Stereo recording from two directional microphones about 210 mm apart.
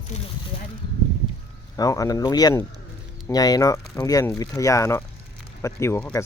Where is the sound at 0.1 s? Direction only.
35° left (ahead or behind).